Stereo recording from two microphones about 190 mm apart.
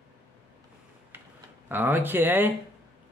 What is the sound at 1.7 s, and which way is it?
Speech, 10° right (ahead or behind).